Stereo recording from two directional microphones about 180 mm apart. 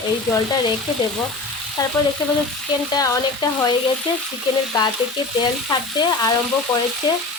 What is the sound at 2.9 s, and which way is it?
Speech, 20° left (ahead or behind).